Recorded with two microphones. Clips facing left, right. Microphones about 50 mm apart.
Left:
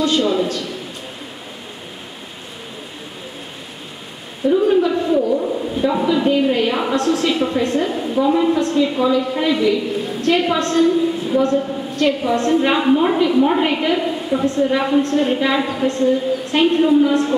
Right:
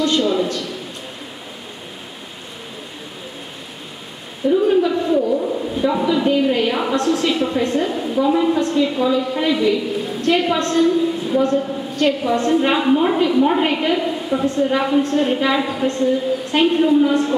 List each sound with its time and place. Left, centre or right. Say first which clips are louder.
0.0 s a woman's voice: left 1 dB; centre
4.5 s a woman's voice: left 1 dB; centre